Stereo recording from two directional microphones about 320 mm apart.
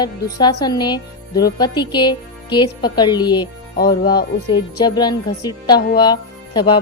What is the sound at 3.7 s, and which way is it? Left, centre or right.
Speech, left.